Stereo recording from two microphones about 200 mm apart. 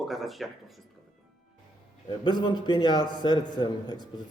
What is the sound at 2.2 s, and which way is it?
A man's voice, 20° left (ahead or behind).